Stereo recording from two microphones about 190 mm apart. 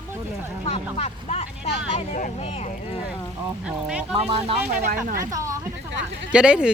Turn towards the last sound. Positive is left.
turn(degrees=-5)  # may be behind; listen again after turning